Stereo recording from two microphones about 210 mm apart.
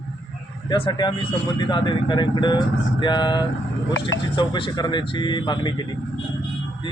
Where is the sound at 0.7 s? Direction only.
20° left (ahead or behind).